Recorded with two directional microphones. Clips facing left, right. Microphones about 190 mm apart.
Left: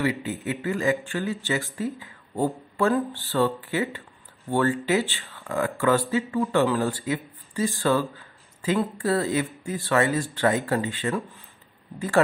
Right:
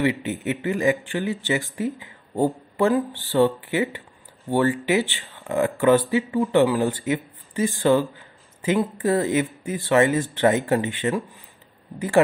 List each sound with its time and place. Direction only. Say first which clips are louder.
0.0 s speech: right 3 dB; 20° right (ahead or behind)